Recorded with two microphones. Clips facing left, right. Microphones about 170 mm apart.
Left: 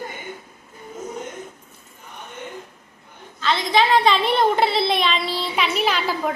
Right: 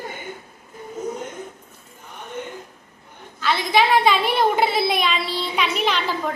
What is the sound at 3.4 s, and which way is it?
A woman's voice, 10° right (ahead or behind).